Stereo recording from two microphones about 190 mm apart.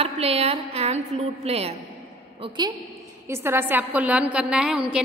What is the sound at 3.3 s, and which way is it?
A woman's voice, 10° right (ahead or behind).